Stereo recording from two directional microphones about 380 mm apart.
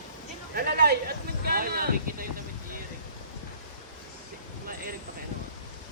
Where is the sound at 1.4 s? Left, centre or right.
Right.